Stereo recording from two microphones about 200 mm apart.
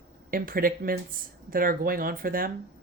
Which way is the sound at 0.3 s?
45° right (ahead or behind).